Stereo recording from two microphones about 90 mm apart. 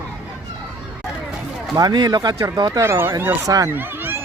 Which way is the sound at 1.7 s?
50° right (ahead or behind).